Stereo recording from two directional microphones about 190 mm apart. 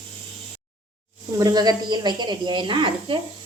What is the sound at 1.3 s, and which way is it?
A woman's voice, 20° right (ahead or behind).